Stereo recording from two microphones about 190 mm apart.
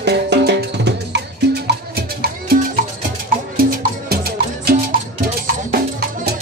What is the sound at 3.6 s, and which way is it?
Music, 50° right (ahead or behind).